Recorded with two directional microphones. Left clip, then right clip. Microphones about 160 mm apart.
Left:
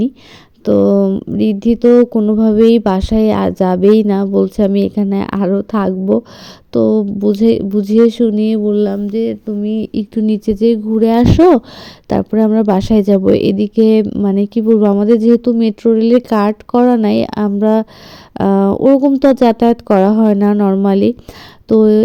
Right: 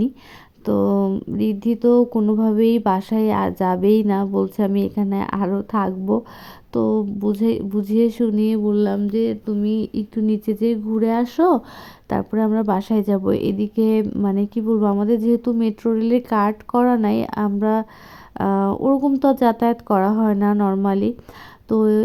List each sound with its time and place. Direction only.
0.6 s speech: 25° left (ahead or behind)
18.9 s speech: 15° left (ahead or behind)
19.2 s speech: centre (ahead or behind)
19.5 s speech: 30° left (ahead or behind)